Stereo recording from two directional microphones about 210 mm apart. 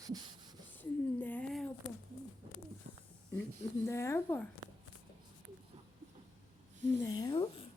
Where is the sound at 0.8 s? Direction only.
10° left (ahead or behind).